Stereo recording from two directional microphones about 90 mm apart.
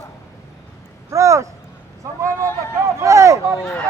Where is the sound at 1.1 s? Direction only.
35° right (ahead or behind).